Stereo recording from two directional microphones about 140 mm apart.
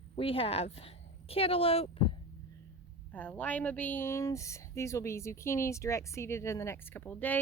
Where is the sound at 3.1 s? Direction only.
10° left (ahead or behind).